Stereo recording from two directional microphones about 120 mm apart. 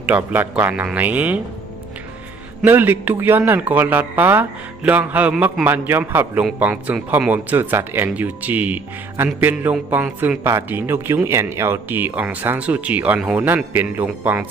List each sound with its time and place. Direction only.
0.1 s speech: 15° right (ahead or behind)
2.6 s speech: 15° right (ahead or behind)